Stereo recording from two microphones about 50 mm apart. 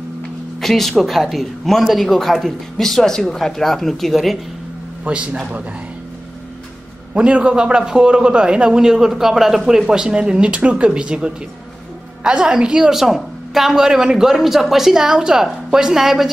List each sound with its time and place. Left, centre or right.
0.6 s speech: centre
5.0 s speech: right
7.2 s a man's voice: centre